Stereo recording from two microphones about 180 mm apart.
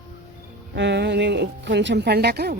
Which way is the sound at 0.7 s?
75° right (ahead or behind).